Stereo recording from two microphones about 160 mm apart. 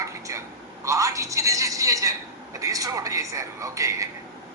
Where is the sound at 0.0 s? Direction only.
20° right (ahead or behind).